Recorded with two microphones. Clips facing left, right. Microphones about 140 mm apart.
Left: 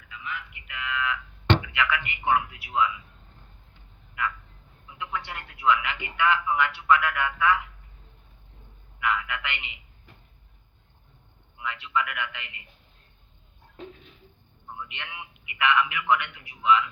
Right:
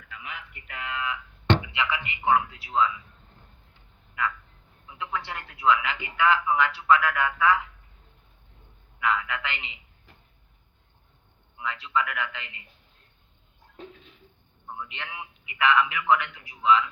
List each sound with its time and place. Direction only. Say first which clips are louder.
0.0 s a sound: left 3 dB; 50° right (ahead or behind)
0.5 s a sound: even; 40° right (ahead or behind)
1.6 s speech: left 2 dB; 25° right (ahead or behind)
4.9 s a man's voice: right 1 dB; 30° right (ahead or behind)
9.0 s a man's voice: right 1 dB; 30° right (ahead or behind)
11.5 s a man's voice: right 1 dB; 30° right (ahead or behind)
14.7 s a man's voice: right 2 dB; 35° right (ahead or behind)